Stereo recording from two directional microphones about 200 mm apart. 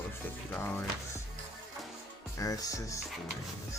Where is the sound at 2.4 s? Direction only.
15° left (ahead or behind).